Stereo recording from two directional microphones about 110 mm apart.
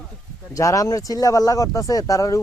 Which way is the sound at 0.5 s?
30° left (ahead or behind).